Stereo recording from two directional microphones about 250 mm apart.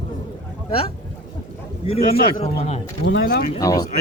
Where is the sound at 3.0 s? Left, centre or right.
Left.